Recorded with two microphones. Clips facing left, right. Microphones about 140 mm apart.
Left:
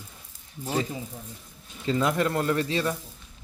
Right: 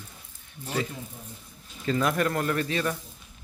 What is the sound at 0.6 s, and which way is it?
Speech, 35° left (ahead or behind).